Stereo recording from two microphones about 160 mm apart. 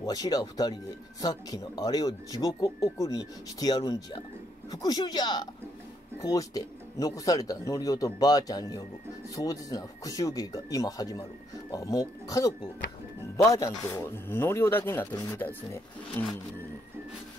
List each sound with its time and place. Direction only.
0.0 s speech: 25° left (ahead or behind)